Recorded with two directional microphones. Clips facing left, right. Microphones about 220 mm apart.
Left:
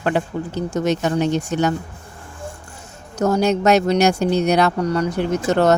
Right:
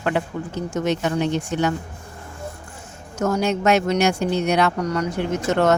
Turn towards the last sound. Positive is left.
turn(degrees=35)  # may be behind; listen again after turning